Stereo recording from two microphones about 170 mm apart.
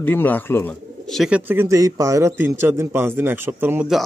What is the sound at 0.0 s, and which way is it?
Speech, 10° left (ahead or behind).